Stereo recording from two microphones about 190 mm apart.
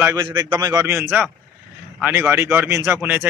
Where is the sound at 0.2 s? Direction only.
25° right (ahead or behind).